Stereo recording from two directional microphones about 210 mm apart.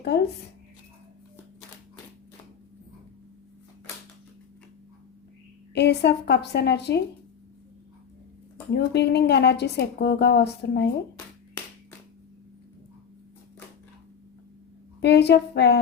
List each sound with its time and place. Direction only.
0.1 s a woman's voice: 50° left (ahead or behind)
5.7 s a woman's voice: 50° left (ahead or behind)
8.7 s a woman's voice: 50° left (ahead or behind)
15.0 s a woman's voice: 55° left (ahead or behind)